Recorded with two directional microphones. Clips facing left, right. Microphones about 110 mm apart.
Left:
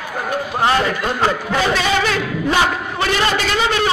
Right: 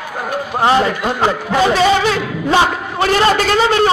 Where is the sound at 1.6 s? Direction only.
30° right (ahead or behind).